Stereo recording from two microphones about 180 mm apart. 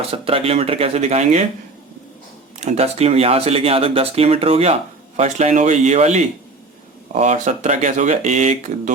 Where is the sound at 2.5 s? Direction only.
40° right (ahead or behind).